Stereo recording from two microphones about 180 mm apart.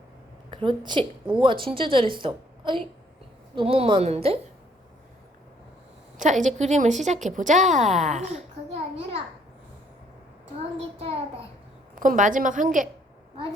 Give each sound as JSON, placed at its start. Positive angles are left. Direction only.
{"t": 0.5, "sound": "a woman's voice", "side_deg": -25}
{"t": 6.1, "sound": "speech", "side_deg": -45}
{"t": 10.6, "sound": "a child's voice", "side_deg": -35}
{"t": 11.9, "sound": "speech", "side_deg": -45}